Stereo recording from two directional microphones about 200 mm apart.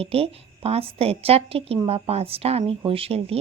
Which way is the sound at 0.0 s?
30° right (ahead or behind).